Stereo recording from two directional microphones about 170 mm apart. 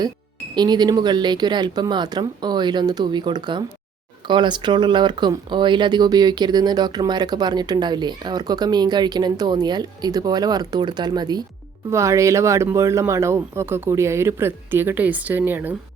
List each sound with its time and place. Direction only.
0.5 s speech: 25° right (ahead or behind)